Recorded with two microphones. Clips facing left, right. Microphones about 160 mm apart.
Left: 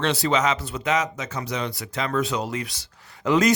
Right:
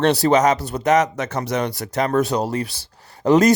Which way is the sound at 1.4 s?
45° right (ahead or behind).